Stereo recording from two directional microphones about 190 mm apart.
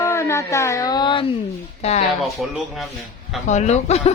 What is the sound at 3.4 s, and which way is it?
Speech, 35° left (ahead or behind).